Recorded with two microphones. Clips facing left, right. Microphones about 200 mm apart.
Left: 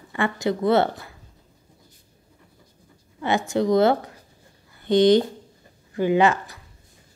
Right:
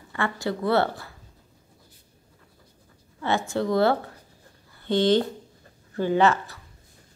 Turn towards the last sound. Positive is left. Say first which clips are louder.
# left 2 dB
turn(degrees=15)  # may be behind; listen again after turning